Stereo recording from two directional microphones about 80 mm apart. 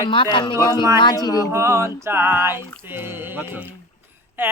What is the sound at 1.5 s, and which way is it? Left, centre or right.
Music, right.